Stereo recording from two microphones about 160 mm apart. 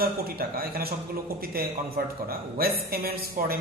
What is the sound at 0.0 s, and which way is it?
A man's voice, 70° right (ahead or behind).